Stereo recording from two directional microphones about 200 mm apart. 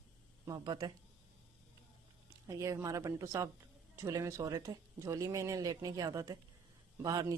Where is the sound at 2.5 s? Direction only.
15° right (ahead or behind).